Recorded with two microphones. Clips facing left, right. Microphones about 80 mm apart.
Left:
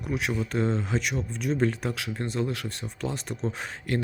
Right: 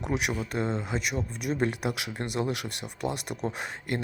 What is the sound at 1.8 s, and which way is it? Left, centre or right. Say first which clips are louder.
Speech: left 1 dB; centre.